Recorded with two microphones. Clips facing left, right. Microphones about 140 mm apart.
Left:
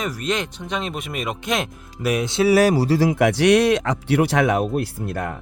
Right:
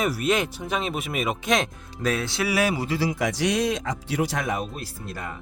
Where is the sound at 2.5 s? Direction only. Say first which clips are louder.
Left 9 dB; 40° left (ahead or behind).